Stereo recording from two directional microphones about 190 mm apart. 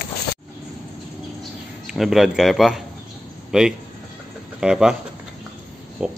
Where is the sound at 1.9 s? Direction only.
Centre (ahead or behind).